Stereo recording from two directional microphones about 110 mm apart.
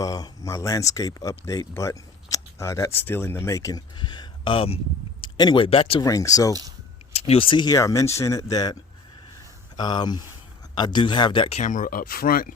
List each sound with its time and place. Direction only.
0.0 s speech: 35° left (ahead or behind); by 4.8 s 55° left (ahead or behind)
5.4 s speech: 40° left (ahead or behind)
5.6 s speech: 55° left (ahead or behind)
6.0 s speech: 30° left (ahead or behind)
6.5 s speech: 35° right (ahead or behind)
7.1 s speech: 70° left (ahead or behind); by 7.8 s 45° left (ahead or behind)
7.8 s speech: 30° left (ahead or behind); by 11.4 s 45° left (ahead or behind)
11.4 s speech: 80° left